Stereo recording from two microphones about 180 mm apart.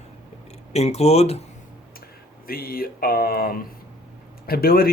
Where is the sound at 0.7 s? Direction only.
35° left (ahead or behind).